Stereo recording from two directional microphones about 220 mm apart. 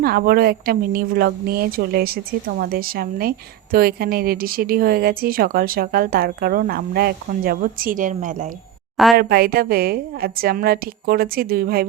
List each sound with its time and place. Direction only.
0.0 s a woman's voice: 45° right (ahead or behind)